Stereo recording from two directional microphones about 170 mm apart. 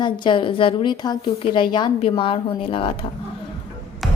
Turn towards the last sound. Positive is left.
turn(degrees=0)  # may be behind; listen again after turning